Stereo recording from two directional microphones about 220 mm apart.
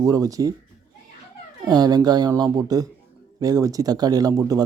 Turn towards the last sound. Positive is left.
turn(degrees=-15)  # may be behind; listen again after turning